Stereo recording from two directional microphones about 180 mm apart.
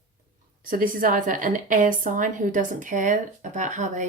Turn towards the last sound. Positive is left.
turn(degrees=-40)  # may be behind; listen again after turning